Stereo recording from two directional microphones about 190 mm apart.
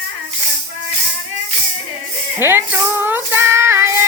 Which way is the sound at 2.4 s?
10° right (ahead or behind).